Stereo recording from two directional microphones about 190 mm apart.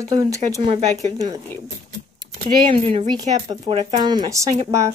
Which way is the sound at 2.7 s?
30° right (ahead or behind).